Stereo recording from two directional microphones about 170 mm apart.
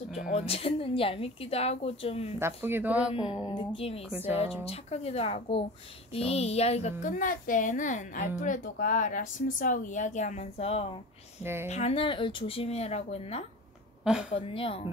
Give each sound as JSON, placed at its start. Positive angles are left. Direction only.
{"t": 0.1, "sound": "a woman's voice", "side_deg": 40}
{"t": 2.3, "sound": "speech", "side_deg": -15}
{"t": 3.3, "sound": "a woman's voice", "side_deg": 25}